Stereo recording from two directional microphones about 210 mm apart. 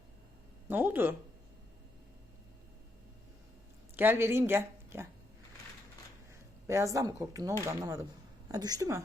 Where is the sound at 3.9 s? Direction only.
10° right (ahead or behind).